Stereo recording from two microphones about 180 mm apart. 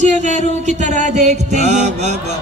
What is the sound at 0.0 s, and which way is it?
Music, 40° right (ahead or behind).